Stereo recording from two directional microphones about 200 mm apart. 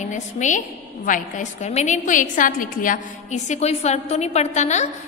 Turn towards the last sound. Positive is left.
turn(degrees=35)  # may be behind; listen again after turning